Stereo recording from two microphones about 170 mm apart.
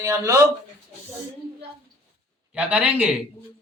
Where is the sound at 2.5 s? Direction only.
5° right (ahead or behind).